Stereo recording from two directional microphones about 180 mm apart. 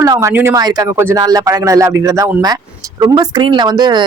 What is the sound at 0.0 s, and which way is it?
Speech, 15° right (ahead or behind).